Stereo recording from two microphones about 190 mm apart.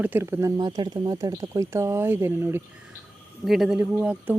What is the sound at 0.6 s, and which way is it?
Speech, 20° right (ahead or behind).